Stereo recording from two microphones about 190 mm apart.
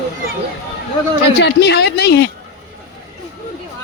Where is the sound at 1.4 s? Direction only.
60° left (ahead or behind).